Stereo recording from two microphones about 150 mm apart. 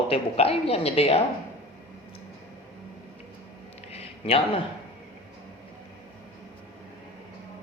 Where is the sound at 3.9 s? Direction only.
40° left (ahead or behind).